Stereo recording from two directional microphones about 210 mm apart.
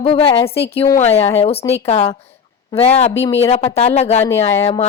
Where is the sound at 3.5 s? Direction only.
30° left (ahead or behind).